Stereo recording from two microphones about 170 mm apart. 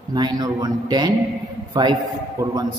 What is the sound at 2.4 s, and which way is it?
Speech, 20° right (ahead or behind).